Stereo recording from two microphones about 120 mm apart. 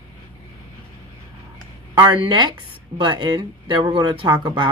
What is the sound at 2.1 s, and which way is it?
Speech, 40° right (ahead or behind).